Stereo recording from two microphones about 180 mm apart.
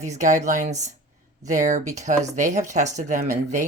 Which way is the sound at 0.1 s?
45° right (ahead or behind).